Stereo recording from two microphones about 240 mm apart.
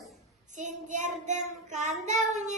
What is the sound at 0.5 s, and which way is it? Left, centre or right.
Child singing, right.